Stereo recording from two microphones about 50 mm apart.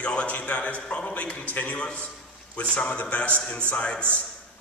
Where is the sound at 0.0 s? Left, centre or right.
Left.